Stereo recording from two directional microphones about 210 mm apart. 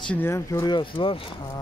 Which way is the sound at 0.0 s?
10° left (ahead or behind).